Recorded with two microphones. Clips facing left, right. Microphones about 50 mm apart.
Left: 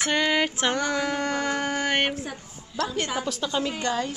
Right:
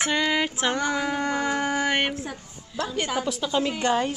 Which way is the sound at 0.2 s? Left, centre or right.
Centre.